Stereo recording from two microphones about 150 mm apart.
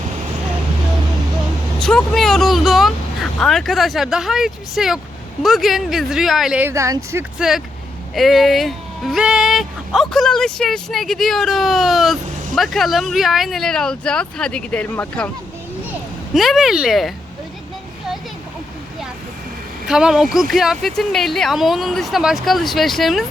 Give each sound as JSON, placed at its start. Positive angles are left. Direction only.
{"t": 1.8, "sound": "speech", "side_deg": 5}
{"t": 6.7, "sound": "speech", "side_deg": -20}
{"t": 7.3, "sound": "speech", "side_deg": -5}
{"t": 19.9, "sound": "speech", "side_deg": -5}